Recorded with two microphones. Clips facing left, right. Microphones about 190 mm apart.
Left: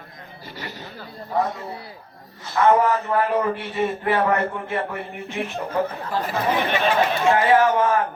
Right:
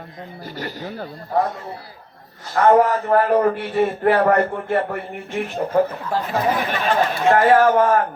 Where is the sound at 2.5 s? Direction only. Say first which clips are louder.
Right 3 dB; 45° right (ahead or behind).